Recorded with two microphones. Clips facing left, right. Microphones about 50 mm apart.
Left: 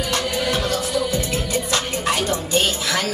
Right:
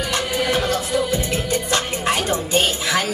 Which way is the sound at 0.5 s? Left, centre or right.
Right.